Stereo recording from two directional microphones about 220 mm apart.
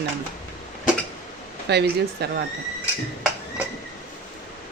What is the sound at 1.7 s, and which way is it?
Speech, 50° right (ahead or behind).